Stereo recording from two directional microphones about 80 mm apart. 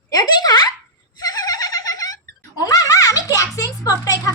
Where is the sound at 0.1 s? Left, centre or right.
Left.